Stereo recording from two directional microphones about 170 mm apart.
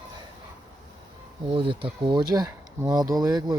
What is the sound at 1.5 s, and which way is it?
Speech, 30° right (ahead or behind).